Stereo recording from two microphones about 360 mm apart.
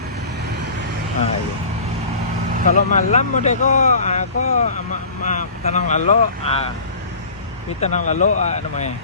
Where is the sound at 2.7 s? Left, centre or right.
Centre.